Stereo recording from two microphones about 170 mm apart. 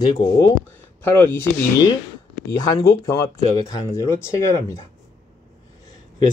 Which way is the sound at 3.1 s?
20° left (ahead or behind).